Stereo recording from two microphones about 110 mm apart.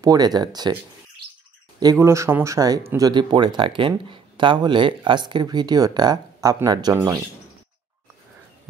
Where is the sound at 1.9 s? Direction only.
25° right (ahead or behind).